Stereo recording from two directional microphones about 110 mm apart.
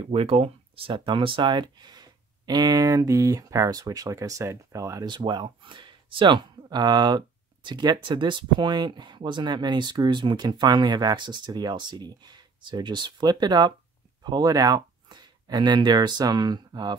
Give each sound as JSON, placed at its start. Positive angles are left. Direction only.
{"t": 0.1, "sound": "speech", "side_deg": -60}
{"t": 5.0, "sound": "speech", "side_deg": -45}